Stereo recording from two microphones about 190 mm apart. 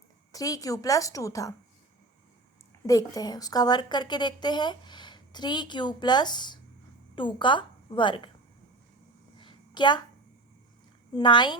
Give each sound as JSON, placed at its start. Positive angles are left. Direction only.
{"t": 0.3, "sound": "a woman's voice", "side_deg": 20}
{"t": 2.8, "sound": "a woman's voice", "side_deg": 20}
{"t": 9.4, "sound": "a sound", "side_deg": 25}
{"t": 11.1, "sound": "a woman's voice", "side_deg": 25}